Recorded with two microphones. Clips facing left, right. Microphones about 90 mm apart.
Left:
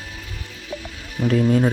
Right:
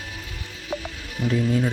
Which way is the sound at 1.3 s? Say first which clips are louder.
Left 5 dB; 60° left (ahead or behind).